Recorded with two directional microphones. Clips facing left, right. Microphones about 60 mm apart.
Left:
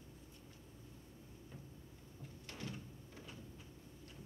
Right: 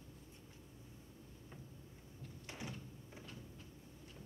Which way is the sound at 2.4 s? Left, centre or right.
Centre.